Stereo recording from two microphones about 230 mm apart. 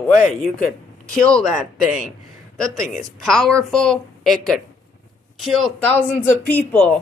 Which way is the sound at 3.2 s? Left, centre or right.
Centre.